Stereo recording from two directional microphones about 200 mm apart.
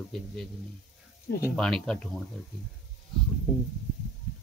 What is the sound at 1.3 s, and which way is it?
Speech, 50° left (ahead or behind).